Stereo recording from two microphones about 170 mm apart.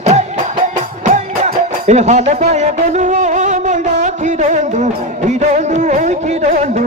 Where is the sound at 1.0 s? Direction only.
45° right (ahead or behind).